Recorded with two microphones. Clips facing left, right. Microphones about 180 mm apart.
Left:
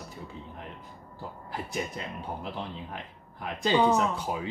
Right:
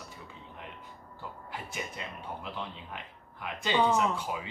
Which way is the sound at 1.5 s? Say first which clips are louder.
Left 7 dB; 35° left (ahead or behind).